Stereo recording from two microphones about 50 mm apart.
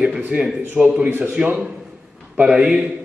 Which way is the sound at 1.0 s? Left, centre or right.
Right.